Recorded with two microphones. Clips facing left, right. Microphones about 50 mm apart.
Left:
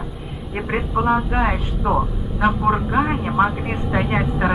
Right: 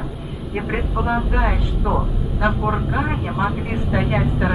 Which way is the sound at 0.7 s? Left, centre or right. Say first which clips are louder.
Left 4 dB; centre.